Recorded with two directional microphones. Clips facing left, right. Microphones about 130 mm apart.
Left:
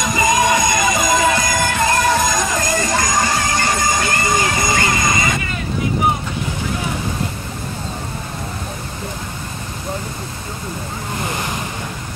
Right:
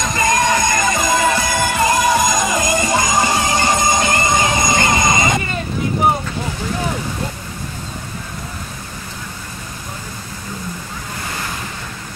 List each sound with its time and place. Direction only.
0.0 s music: 5° left (ahead or behind); by 4.5 s 20° right (ahead or behind)
4.9 s vehicle: 20° right (ahead or behind)